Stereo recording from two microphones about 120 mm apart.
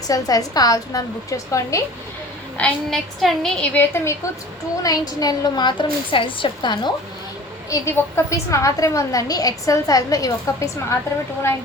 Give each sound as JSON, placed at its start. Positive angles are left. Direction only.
{"t": 0.1, "sound": "a woman's voice", "side_deg": 30}
{"t": 2.6, "sound": "a woman's voice", "side_deg": 5}
{"t": 3.8, "sound": "a woman's voice", "side_deg": 20}
{"t": 4.8, "sound": "a woman's voice", "side_deg": 30}
{"t": 7.7, "sound": "a woman's voice", "side_deg": 25}